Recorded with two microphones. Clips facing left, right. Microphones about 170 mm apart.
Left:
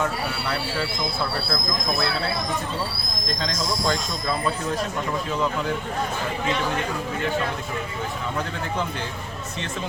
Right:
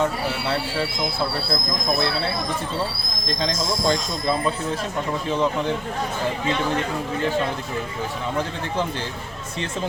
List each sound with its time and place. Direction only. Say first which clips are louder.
0.0 s speech: right 3 dB; 25° right (ahead or behind)
3.4 s speech: right 3 dB; 25° right (ahead or behind)